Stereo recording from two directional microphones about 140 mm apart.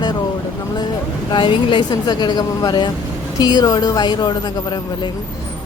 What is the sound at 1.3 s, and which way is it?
A woman's voice, 35° left (ahead or behind).